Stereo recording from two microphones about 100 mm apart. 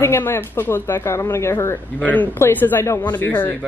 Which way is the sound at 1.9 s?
15° left (ahead or behind).